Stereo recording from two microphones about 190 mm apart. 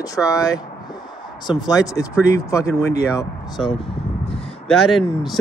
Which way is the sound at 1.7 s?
20° left (ahead or behind).